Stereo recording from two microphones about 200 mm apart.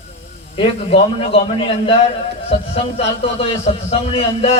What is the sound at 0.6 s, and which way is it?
A man's voice, 30° left (ahead or behind).